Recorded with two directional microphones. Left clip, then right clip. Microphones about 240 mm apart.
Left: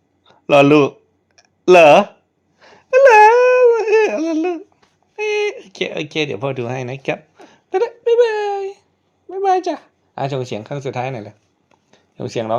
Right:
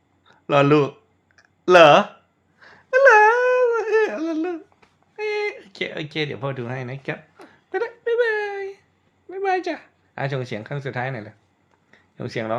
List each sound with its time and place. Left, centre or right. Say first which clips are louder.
0.3 s speech: left 6 dB; left
1.4 s clicking: left 3 dB; left
2.6 s a sound: left 6 dB; left
5.1 s speech: left 6 dB; left
7.4 s whimper: left 7 dB; left
9.3 s a woman's voice: left 6 dB; centre
11.9 s a sound: left 5 dB; centre